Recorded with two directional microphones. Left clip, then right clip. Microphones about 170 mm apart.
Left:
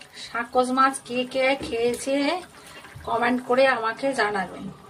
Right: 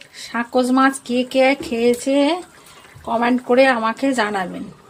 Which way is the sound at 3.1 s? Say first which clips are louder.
Right 6 dB; 45° right (ahead or behind).